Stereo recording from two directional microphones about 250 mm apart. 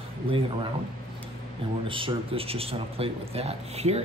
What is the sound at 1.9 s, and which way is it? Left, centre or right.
A man's voice, right.